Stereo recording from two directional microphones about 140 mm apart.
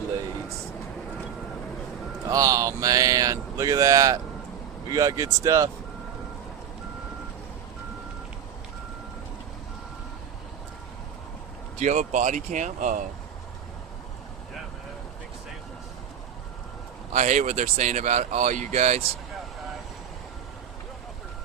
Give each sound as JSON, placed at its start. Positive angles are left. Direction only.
{"t": 2.3, "sound": "speech", "side_deg": -25}
{"t": 11.8, "sound": "speech", "side_deg": -60}
{"t": 17.1, "sound": "speech", "side_deg": -55}